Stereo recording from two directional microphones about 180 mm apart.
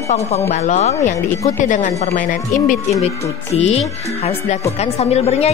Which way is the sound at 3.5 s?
35° left (ahead or behind).